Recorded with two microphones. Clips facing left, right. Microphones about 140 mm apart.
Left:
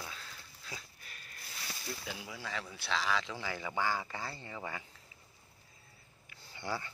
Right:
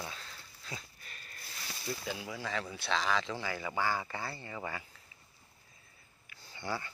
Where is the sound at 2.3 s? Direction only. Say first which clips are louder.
Right 4 dB; 5° left (ahead or behind).